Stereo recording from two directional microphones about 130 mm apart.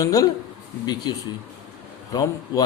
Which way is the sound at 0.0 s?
25° left (ahead or behind).